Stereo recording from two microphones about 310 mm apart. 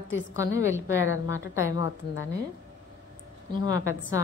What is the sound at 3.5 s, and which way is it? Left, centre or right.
Speech, centre.